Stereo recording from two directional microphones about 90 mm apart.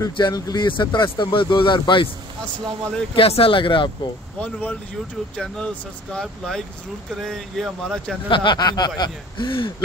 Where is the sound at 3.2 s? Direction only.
90° left; by 3.9 s 70° left (ahead or behind).